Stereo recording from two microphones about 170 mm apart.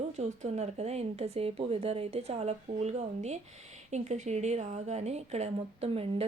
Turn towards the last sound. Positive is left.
turn(degrees=-40)  # may be behind; listen again after turning